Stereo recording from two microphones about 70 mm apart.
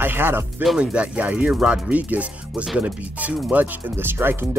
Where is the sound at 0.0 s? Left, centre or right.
Right.